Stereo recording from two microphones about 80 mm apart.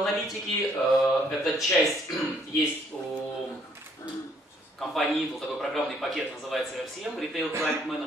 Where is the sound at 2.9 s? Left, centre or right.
Centre.